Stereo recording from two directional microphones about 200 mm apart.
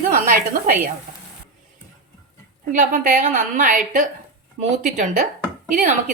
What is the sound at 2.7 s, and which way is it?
A woman's voice, 40° right (ahead or behind).